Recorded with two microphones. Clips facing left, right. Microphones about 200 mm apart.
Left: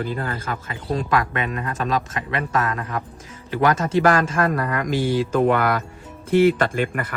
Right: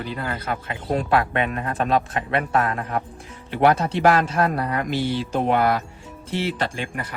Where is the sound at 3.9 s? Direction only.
45° left (ahead or behind).